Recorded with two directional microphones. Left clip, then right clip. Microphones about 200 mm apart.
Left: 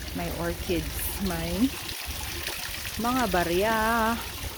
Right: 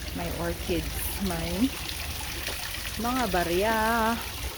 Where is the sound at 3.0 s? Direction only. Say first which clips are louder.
Left 2 dB; 35° left (ahead or behind).